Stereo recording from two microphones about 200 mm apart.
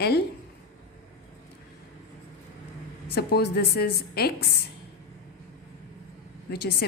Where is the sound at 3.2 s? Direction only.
55° left (ahead or behind).